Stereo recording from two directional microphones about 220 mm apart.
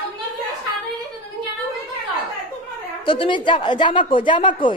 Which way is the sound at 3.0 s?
25° left (ahead or behind).